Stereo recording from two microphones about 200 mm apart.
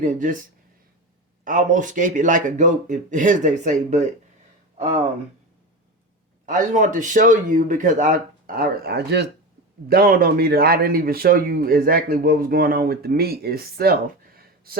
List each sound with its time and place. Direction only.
0.0 s a man's voice: 40° right (ahead or behind)
1.5 s a man's voice: 40° right (ahead or behind)
6.4 s a man's voice: 40° right (ahead or behind)
14.3 s a sound: 50° right (ahead or behind)